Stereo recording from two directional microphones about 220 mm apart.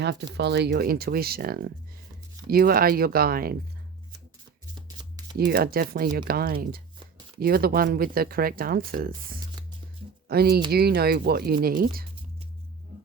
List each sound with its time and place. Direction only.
0.0 s speech: 50° right (ahead or behind)
4.7 s a sound: 20° right (ahead or behind)
5.5 s speech: 45° right (ahead or behind)